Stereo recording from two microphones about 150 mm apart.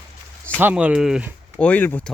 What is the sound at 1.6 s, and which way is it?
Speech, 10° left (ahead or behind).